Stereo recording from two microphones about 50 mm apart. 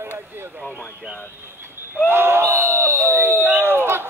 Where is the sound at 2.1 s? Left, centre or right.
Right.